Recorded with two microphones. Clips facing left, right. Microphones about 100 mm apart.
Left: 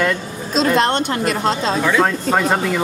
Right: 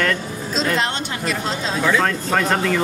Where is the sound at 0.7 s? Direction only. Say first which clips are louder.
Left 6 dB; 55° left (ahead or behind).